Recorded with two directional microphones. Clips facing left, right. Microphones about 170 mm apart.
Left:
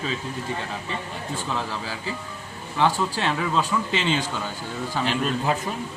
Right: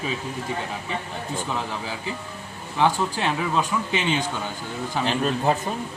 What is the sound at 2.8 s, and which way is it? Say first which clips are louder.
Speech: right 1 dB; 15° right (ahead or behind).